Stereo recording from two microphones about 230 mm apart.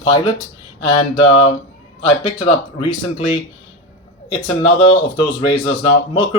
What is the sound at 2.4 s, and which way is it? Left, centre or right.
Speech, left.